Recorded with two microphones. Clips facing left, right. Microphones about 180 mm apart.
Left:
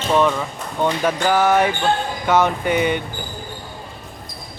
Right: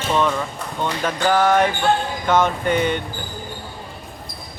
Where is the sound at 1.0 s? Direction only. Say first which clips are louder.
Right 1 dB; 5° left (ahead or behind).